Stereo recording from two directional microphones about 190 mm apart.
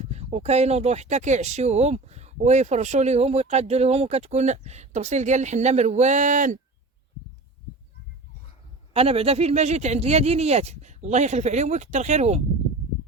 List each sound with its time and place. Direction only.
0.0 s speech: 35° right (ahead or behind)
8.9 s speech: 30° right (ahead or behind)